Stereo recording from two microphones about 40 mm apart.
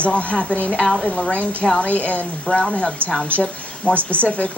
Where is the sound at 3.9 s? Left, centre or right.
Left.